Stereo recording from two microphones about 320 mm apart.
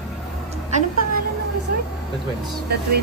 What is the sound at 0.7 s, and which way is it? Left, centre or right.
Speech, right.